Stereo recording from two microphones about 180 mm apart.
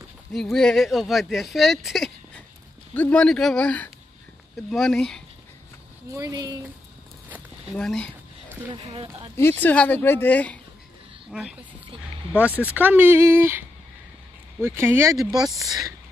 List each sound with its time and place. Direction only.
0.3 s speech: centre (ahead or behind)
6.1 s speech: 20° right (ahead or behind)
7.7 s speech: 5° left (ahead or behind)
8.7 s speech: 30° right (ahead or behind)
9.4 s speech: 10° left (ahead or behind)
11.3 s speech: 5° right (ahead or behind)
12.7 s speech: 10° right (ahead or behind)
15.5 s speech: centre (ahead or behind)